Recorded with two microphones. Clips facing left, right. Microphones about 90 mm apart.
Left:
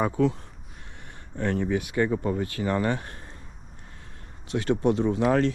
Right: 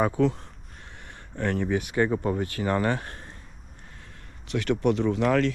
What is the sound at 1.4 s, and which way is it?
Speech, 55° right (ahead or behind).